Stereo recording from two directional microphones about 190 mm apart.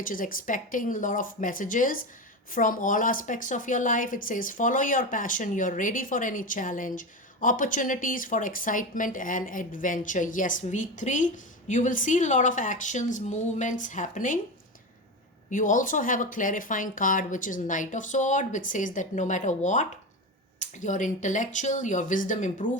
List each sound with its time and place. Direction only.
0.0 s a woman's voice: 45° left (ahead or behind)
15.4 s a woman's voice: 45° left (ahead or behind)